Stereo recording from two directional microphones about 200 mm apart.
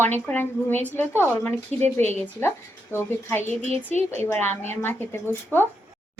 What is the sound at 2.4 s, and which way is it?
A woman's voice, 15° left (ahead or behind).